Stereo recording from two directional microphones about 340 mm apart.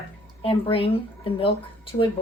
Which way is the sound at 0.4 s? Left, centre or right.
Centre.